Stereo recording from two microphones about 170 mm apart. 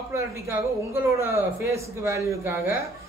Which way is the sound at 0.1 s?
15° right (ahead or behind).